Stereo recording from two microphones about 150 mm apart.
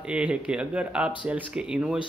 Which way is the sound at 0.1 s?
5° right (ahead or behind).